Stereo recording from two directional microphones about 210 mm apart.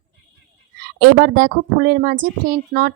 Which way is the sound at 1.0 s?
45° right (ahead or behind).